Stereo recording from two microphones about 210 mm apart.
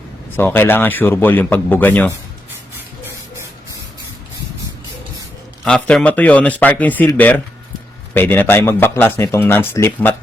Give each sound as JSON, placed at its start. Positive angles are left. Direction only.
{"t": 0.3, "sound": "speech", "side_deg": 10}
{"t": 5.6, "sound": "speech", "side_deg": 5}